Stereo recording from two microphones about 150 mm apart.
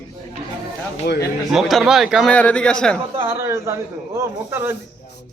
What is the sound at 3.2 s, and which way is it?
Speech, 15° right (ahead or behind).